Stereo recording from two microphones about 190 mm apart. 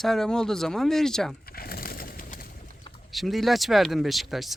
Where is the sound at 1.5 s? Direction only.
50° left (ahead or behind).